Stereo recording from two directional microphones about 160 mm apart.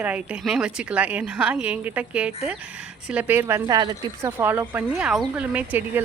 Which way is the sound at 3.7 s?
25° right (ahead or behind).